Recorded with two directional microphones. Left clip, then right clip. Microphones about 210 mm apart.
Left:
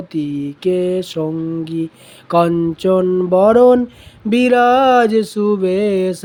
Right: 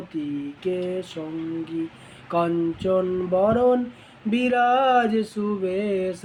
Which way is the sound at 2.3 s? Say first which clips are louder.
Left 9 dB; 55° left (ahead or behind).